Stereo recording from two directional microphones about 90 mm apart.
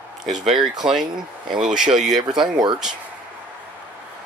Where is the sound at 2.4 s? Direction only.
60° right (ahead or behind).